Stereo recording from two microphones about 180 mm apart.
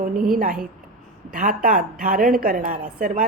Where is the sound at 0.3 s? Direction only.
50° right (ahead or behind).